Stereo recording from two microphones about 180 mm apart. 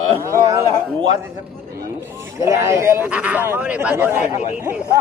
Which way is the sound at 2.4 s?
15° right (ahead or behind).